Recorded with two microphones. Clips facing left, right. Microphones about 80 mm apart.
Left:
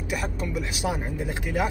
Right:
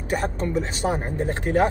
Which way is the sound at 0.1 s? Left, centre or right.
Right.